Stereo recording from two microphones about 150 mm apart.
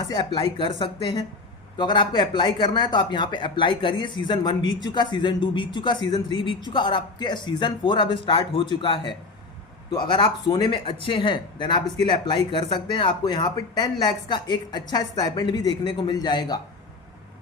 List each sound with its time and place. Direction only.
0.0 s speech: 30° left (ahead or behind)